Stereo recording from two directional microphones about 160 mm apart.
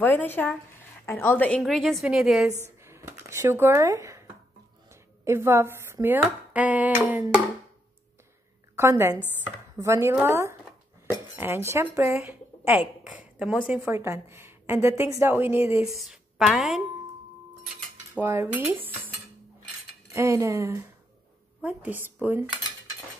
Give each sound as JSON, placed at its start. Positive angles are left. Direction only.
{"t": 0.0, "sound": "speech", "side_deg": 10}
{"t": 1.6, "sound": "a woman's voice", "side_deg": 0}
{"t": 2.8, "sound": "speech", "side_deg": -15}
{"t": 4.8, "sound": "a sound", "side_deg": -15}
{"t": 6.5, "sound": "a woman's voice", "side_deg": -10}
{"t": 8.7, "sound": "a woman's voice", "side_deg": -15}
{"t": 12.3, "sound": "a sound", "side_deg": -10}
{"t": 13.7, "sound": "a woman's voice", "side_deg": -15}
{"t": 15.8, "sound": "a woman's voice", "side_deg": 0}
{"t": 18.1, "sound": "a woman's voice", "side_deg": -15}
{"t": 20.1, "sound": "a woman's voice", "side_deg": -20}